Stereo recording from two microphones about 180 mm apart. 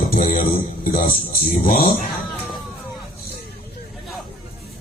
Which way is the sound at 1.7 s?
45° left (ahead or behind).